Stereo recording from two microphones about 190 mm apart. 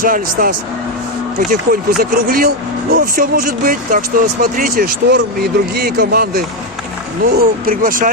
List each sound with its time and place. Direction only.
0.0 s speech: 50° right (ahead or behind)